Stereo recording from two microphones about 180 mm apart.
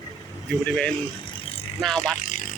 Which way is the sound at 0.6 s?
10° left (ahead or behind).